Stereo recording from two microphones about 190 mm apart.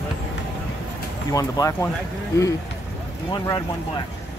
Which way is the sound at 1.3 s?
15° left (ahead or behind).